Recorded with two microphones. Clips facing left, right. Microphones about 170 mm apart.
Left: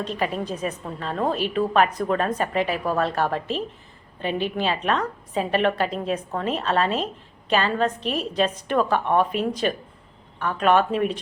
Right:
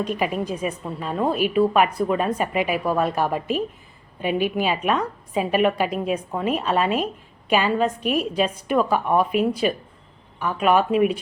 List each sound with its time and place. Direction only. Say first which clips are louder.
0.0 s a woman's voice: right 2 dB; 10° right (ahead or behind)